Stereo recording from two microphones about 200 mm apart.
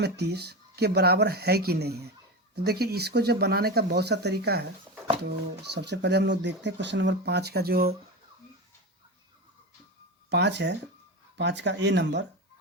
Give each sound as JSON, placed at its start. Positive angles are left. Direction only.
{"t": 0.0, "sound": "speech", "side_deg": -55}
{"t": 5.7, "sound": "speech", "side_deg": -55}
{"t": 10.2, "sound": "speech", "side_deg": -60}